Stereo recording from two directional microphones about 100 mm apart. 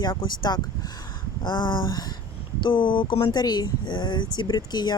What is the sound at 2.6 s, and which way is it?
Speech, 55° left (ahead or behind).